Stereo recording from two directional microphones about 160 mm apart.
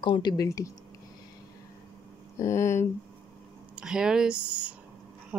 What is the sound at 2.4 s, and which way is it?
Speech, 15° left (ahead or behind).